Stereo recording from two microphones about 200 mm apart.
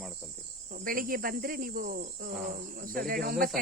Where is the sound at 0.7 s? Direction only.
45° right (ahead or behind).